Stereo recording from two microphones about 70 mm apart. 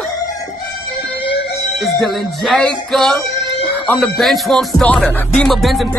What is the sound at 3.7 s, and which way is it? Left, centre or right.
Speech, left.